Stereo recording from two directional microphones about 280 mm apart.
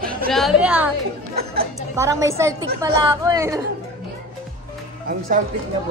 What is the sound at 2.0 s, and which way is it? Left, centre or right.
Speech, centre.